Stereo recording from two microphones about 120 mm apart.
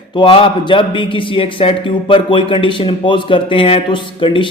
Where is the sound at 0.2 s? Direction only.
45° left (ahead or behind).